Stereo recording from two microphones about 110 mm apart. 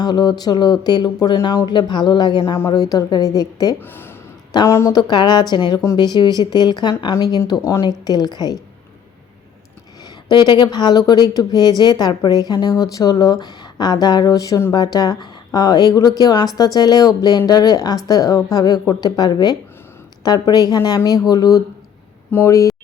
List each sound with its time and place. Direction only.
0.0 s speech: 40° left (ahead or behind)
2.4 s speech: 25° left (ahead or behind)
3.8 s speech: 20° left (ahead or behind)
4.9 s speech: 40° left (ahead or behind)
10.2 s speech: 45° left (ahead or behind)